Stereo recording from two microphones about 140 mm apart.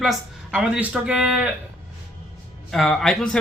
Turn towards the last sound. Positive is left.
turn(degrees=5)  # may be behind; listen again after turning